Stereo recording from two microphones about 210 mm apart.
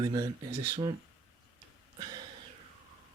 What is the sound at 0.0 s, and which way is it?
Speech, 20° right (ahead or behind).